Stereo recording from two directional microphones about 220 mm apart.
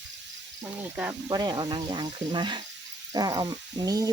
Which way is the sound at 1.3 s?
20° right (ahead or behind).